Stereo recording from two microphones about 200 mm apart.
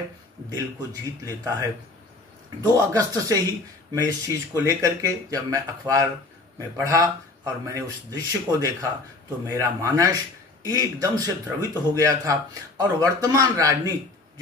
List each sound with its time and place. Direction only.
1.2 s a man's voice: 15° right (ahead or behind)
2.7 s a man's voice: 15° right (ahead or behind)